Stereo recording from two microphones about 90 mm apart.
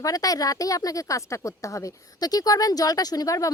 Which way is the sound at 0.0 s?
40° left (ahead or behind).